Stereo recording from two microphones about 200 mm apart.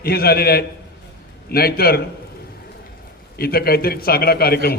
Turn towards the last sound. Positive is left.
turn(degrees=50)  # may be behind; listen again after turning